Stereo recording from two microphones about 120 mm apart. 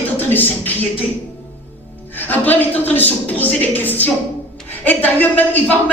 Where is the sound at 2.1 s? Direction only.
15° left (ahead or behind).